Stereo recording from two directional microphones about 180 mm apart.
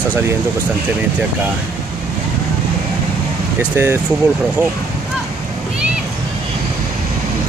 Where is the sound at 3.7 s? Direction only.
10° right (ahead or behind).